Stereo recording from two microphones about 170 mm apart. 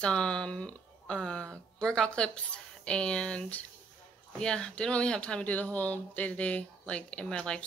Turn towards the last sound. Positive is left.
turn(degrees=5)  # may be behind; listen again after turning